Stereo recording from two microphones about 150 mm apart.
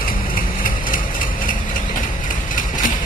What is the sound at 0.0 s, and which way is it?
Vehicle, 70° left (ahead or behind).